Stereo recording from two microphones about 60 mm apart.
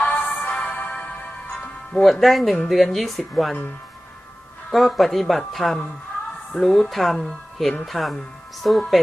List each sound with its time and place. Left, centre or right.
0.0 s music: left
2.2 s speech: centre
4.7 s speech: centre